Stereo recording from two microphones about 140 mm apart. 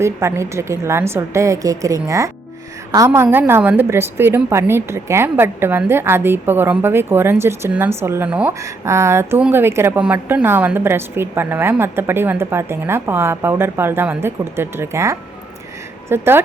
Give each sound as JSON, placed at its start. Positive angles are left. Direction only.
{"t": 0.0, "sound": "a woman's voice", "side_deg": -20}